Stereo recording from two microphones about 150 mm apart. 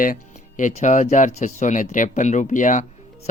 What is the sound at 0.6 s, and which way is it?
Speech, 55° left (ahead or behind).